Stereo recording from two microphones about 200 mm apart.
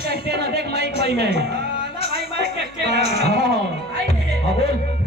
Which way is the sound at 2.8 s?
55° right (ahead or behind).